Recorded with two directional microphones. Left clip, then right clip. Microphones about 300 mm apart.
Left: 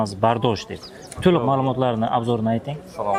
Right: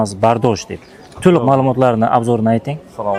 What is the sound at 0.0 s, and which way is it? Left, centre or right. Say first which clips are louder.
A man's voice: right 6 dB; centre.